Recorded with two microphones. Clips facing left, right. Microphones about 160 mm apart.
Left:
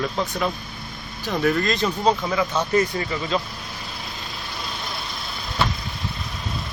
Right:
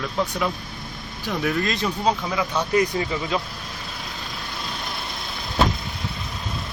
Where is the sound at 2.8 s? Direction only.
15° right (ahead or behind).